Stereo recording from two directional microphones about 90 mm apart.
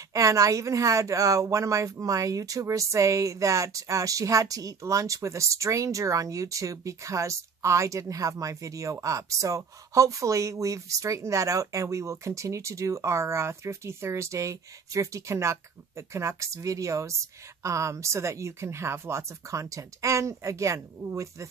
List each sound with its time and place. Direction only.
0.1 s speech: 40° right (ahead or behind)